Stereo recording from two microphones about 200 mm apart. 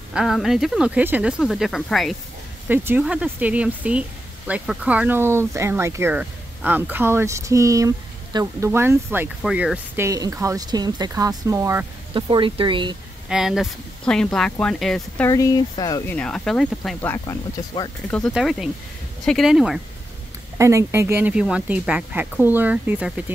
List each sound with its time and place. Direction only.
0.1 s speech: centre (ahead or behind)
2.7 s speech: 10° right (ahead or behind)
13.3 s speech: centre (ahead or behind)
15.2 s speech: 15° left (ahead or behind)
16.2 s speech: 5° left (ahead or behind)
20.5 s speech: 15° right (ahead or behind)